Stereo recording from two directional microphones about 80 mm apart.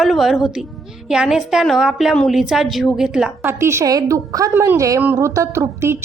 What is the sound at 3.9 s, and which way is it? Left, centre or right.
Speech, right.